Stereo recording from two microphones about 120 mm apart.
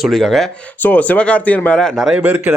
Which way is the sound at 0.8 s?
15° left (ahead or behind).